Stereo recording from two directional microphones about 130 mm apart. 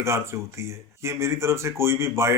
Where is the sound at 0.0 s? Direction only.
20° right (ahead or behind).